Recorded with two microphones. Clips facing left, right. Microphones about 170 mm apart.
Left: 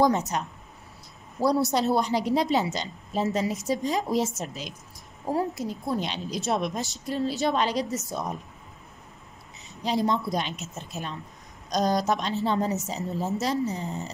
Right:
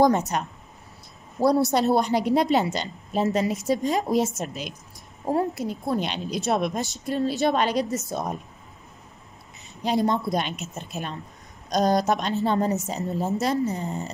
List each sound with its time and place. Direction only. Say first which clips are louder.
0.0 s speech: right 3 dB; 55° right (ahead or behind)
1.7 s a woman's voice: right 3 dB; 60° right (ahead or behind)
9.8 s a woman's voice: right 2 dB; 55° right (ahead or behind)